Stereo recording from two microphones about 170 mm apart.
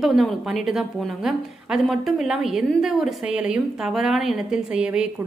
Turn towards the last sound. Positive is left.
turn(degrees=-5)  # may be behind; listen again after turning